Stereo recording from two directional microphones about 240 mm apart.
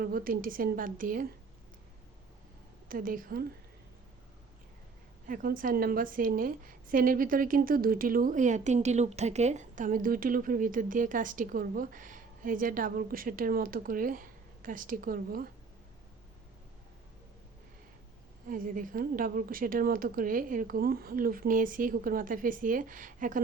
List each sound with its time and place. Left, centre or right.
0.0 s a woman's voice: right
2.9 s a woman's voice: right
5.3 s a woman's voice: right
18.4 s a woman's voice: right